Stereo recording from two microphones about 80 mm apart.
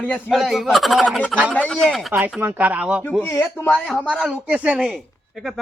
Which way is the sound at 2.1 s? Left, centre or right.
Right.